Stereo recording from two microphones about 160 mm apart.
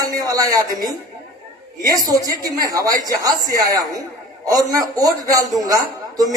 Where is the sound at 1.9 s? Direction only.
25° right (ahead or behind).